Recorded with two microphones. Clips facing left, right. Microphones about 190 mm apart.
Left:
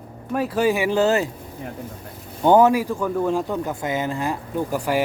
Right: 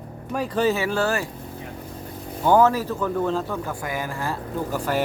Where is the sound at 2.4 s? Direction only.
20° left (ahead or behind).